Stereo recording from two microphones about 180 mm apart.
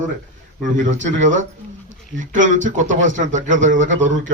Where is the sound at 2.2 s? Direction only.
45° right (ahead or behind).